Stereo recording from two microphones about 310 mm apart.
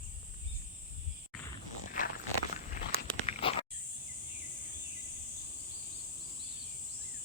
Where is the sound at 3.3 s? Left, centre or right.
Centre.